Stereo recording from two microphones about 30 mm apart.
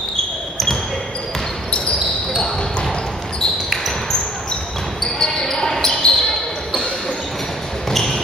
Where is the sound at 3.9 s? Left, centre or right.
Centre.